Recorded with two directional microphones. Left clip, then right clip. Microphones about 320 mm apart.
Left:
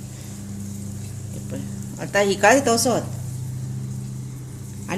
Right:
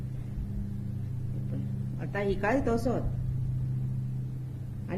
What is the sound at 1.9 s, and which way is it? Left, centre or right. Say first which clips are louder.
Speech: left 12 dB; left.